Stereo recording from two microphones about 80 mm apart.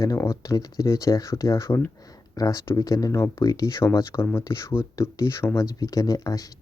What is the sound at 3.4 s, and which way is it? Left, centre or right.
Speech, left.